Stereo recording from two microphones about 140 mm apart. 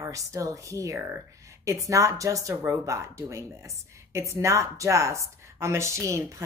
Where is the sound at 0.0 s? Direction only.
20° right (ahead or behind).